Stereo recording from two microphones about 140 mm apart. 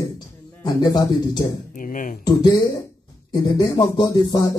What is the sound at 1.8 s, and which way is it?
Speech, 75° left (ahead or behind).